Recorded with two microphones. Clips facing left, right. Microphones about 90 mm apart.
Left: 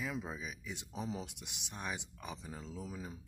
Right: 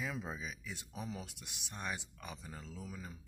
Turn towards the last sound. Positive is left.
turn(degrees=20)  # may be behind; listen again after turning